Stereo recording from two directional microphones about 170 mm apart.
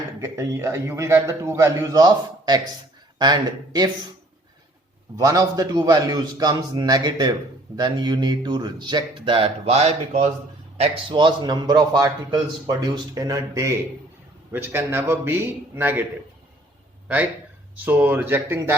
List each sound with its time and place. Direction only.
0.2 s a man's voice: 15° right (ahead or behind)
5.1 s a man's voice: 20° right (ahead or behind)
17.8 s a man's voice: 10° right (ahead or behind)